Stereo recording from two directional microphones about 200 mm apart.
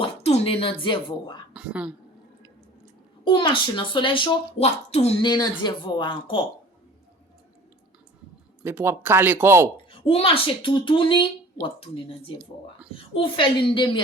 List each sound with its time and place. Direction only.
0.0 s speech: 30° left (ahead or behind)
1.5 s a woman's voice: 5° right (ahead or behind)
3.2 s speech: 25° left (ahead or behind)
8.6 s speech: 10° right (ahead or behind)
9.9 s speech: 25° left (ahead or behind)